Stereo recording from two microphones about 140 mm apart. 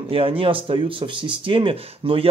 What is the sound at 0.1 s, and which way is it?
Speech, 40° right (ahead or behind).